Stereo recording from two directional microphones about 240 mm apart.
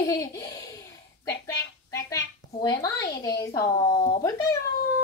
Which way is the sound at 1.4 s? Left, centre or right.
Centre.